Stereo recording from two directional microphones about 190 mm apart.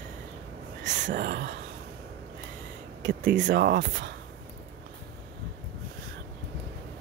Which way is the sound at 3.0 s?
70° right (ahead or behind).